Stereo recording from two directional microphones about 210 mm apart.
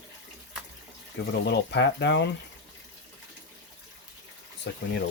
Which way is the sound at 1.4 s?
55° left (ahead or behind).